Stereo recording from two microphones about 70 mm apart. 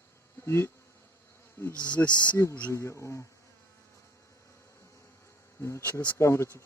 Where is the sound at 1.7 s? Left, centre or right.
Centre.